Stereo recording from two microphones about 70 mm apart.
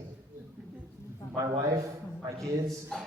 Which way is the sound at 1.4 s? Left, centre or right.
Right.